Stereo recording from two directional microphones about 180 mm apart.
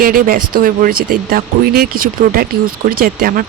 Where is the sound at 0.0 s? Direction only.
50° right (ahead or behind).